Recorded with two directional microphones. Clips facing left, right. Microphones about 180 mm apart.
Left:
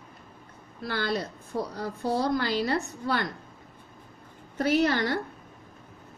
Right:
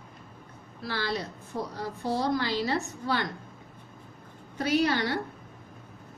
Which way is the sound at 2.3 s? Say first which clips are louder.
Left 1 dB; 50° left (ahead or behind).